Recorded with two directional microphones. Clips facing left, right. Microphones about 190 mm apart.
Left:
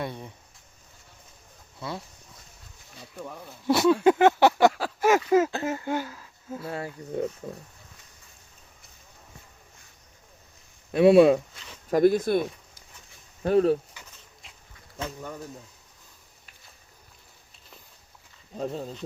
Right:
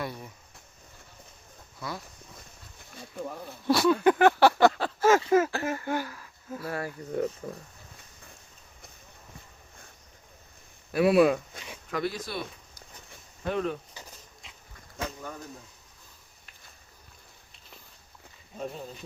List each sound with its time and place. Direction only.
0.0 s speech: 25° left (ahead or behind)
1.8 s speech: 30° left (ahead or behind)
3.7 s speech: 25° left (ahead or behind)
4.5 s a sound: 10° left (ahead or behind)
5.3 s speech: 20° left (ahead or behind)
10.9 s speech: 25° left (ahead or behind)
11.9 s speech: 45° left (ahead or behind)
13.4 s speech: 40° left (ahead or behind)